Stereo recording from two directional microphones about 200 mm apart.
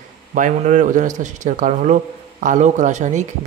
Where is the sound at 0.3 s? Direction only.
40° right (ahead or behind).